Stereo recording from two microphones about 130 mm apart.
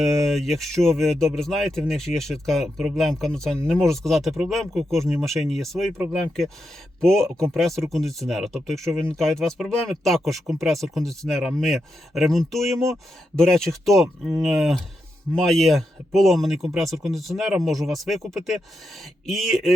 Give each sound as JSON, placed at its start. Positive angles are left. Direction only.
{"t": 0.0, "sound": "speech", "side_deg": 0}
{"t": 7.0, "sound": "speech", "side_deg": 5}
{"t": 7.3, "sound": "speech", "side_deg": -20}
{"t": 7.5, "sound": "speech", "side_deg": 0}